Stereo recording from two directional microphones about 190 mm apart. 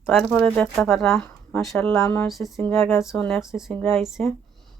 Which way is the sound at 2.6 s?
10° left (ahead or behind).